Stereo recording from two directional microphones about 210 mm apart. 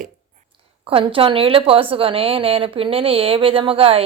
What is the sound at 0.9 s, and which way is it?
A woman's voice, 25° right (ahead or behind).